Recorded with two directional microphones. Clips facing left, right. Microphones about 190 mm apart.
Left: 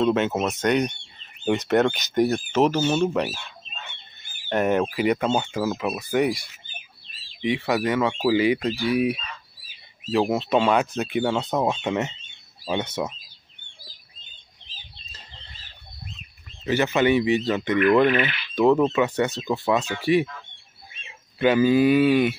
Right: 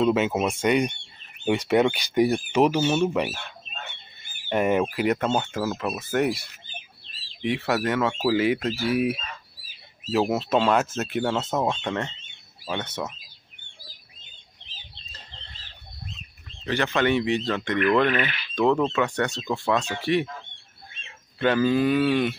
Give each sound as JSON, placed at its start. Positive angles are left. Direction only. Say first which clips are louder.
{"t": 0.0, "sound": "speech", "louder": "even", "side_deg": -5}
{"t": 3.3, "sound": "fowl", "louder": "right 2 dB", "side_deg": -55}
{"t": 4.5, "sound": "speech", "louder": "left 1 dB", "side_deg": -5}
{"t": 16.6, "sound": "speech", "louder": "left 3 dB", "side_deg": 5}